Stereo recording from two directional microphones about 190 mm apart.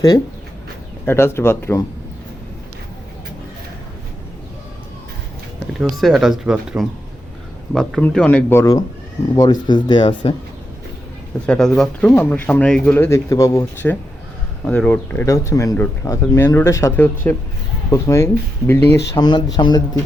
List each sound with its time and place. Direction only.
1.0 s speech: 10° left (ahead or behind)
5.7 s speech: centre (ahead or behind); by 10.3 s 25° left (ahead or behind)
11.4 s speech: 5° left (ahead or behind); by 20.0 s 20° left (ahead or behind)